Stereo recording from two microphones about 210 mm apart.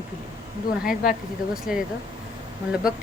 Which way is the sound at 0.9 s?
45° left (ahead or behind).